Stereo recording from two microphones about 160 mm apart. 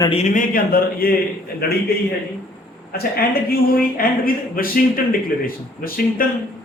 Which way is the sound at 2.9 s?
75° left (ahead or behind).